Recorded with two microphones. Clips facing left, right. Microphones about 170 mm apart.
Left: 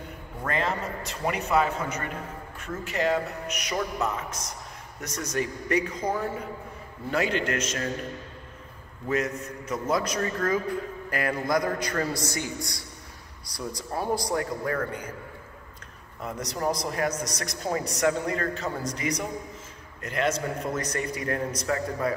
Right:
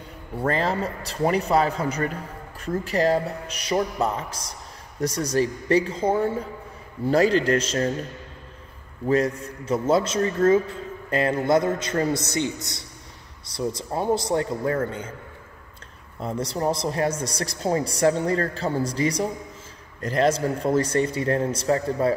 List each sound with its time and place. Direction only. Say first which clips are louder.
0.4 s a man's voice: right 5 dB; 35° right (ahead or behind)
9.0 s a man's voice: right 6 dB; 30° right (ahead or behind)
16.2 s a man's voice: right 5 dB; 30° right (ahead or behind)